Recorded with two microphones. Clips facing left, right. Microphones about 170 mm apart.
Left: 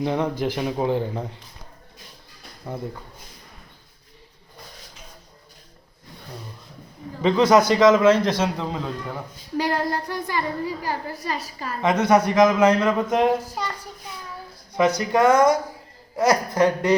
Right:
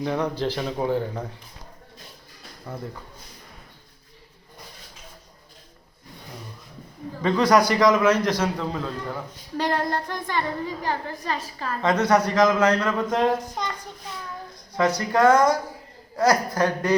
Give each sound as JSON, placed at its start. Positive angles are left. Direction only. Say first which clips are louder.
{"t": 0.0, "sound": "a woman's voice", "louder": "left 2 dB", "side_deg": 20}
{"t": 7.2, "sound": "a man's voice", "louder": "left 2 dB", "side_deg": 20}
{"t": 14.8, "sound": "a man's voice", "louder": "left 1 dB", "side_deg": 20}